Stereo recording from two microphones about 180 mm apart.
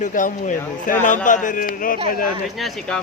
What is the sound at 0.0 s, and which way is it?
Speech, 45° left (ahead or behind).